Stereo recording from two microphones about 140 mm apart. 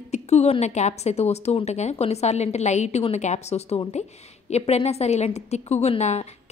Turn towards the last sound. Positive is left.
turn(degrees=50)  # may be behind; listen again after turning